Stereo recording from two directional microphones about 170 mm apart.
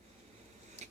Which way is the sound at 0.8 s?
40° right (ahead or behind).